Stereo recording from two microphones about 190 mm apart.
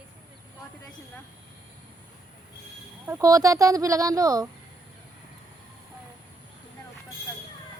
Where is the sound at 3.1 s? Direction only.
15° right (ahead or behind).